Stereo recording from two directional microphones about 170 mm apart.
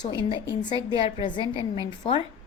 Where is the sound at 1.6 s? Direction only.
20° right (ahead or behind).